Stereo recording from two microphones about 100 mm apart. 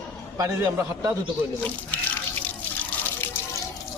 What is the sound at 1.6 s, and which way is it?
Speech, 15° left (ahead or behind).